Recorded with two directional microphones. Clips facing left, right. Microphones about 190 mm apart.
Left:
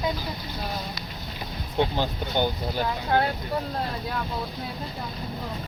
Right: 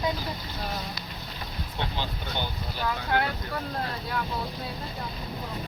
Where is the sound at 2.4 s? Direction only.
50° left (ahead or behind).